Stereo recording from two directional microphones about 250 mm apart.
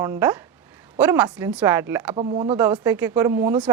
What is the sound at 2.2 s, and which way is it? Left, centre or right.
Speech, right.